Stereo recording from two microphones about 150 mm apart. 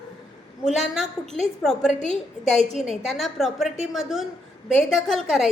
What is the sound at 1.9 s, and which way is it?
Speech, 50° left (ahead or behind).